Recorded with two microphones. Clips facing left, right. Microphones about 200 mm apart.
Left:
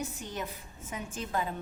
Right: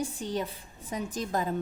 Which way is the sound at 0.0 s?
30° right (ahead or behind).